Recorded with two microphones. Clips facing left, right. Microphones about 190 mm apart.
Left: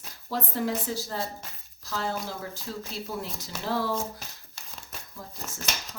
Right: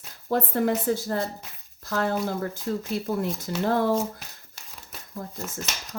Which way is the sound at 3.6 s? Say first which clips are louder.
Right 6 dB; 50° right (ahead or behind).